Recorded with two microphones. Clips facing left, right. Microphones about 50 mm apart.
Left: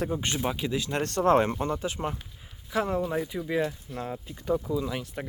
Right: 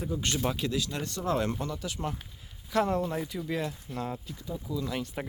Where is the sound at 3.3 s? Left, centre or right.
Centre.